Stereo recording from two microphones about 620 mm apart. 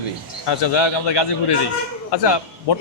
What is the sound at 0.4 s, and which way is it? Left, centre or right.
A man's voice, left.